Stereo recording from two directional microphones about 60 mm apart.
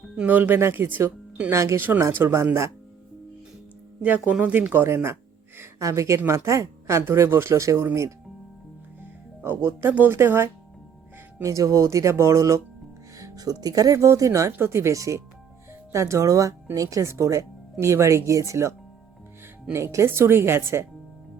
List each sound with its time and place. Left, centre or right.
0.3 s speech: right
0.6 s speech: right
1.5 s a woman's voice: right
4.3 s speech: right
5.8 s speech: right
7.1 s a woman's voice: right
9.4 s a woman's voice: right
11.4 s speech: right
13.1 s speech: right
14.6 s a woman's voice: right
19.7 s a woman's voice: right